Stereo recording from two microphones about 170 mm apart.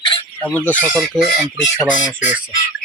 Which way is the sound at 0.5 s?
10° left (ahead or behind).